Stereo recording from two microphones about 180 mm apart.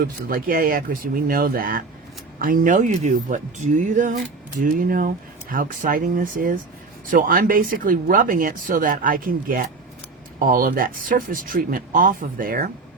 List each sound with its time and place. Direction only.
0.0 s speech: 50° right (ahead or behind)